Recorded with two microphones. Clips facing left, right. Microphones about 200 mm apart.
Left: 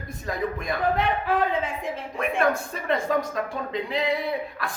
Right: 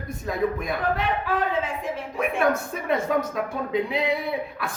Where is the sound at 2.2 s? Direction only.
5° right (ahead or behind).